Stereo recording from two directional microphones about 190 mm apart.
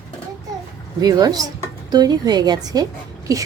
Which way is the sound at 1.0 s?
20° right (ahead or behind).